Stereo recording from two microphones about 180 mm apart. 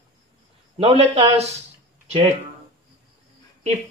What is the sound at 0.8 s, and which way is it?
Speech, 30° right (ahead or behind).